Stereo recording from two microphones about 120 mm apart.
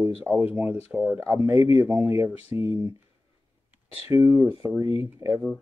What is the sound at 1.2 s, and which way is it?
Speech, 20° right (ahead or behind).